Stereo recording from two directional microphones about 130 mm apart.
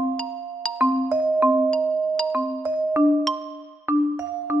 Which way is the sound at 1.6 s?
5° left (ahead or behind).